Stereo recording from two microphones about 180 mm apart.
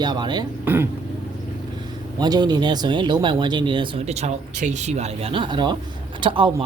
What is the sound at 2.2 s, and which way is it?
Speech, 25° right (ahead or behind).